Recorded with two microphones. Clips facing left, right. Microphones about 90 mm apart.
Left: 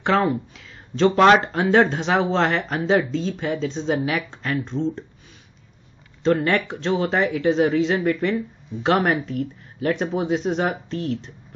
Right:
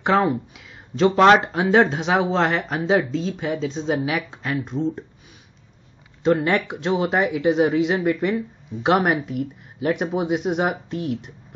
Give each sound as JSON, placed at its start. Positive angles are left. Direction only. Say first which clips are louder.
{"t": 0.0, "sound": "speech", "louder": "right 1 dB", "side_deg": -15}
{"t": 6.2, "sound": "speech", "louder": "even", "side_deg": -15}